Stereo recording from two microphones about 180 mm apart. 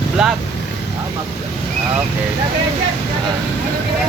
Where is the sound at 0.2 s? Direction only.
5° right (ahead or behind).